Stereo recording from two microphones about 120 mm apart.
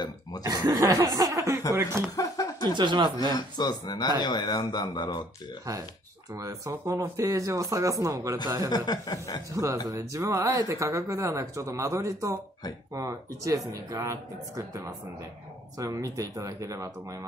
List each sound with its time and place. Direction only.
0.5 s speech: 30° right (ahead or behind)
2.1 s speech: 30° left (ahead or behind)
2.6 s speech: 40° right (ahead or behind)
3.2 s speech: 35° left (ahead or behind)
6.3 s speech: 25° right (ahead or behind)
8.6 s speech: 35° left (ahead or behind)
9.5 s speech: 25° right (ahead or behind)